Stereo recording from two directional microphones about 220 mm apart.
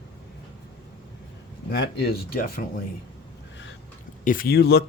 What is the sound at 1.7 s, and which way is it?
Speech, 45° left (ahead or behind).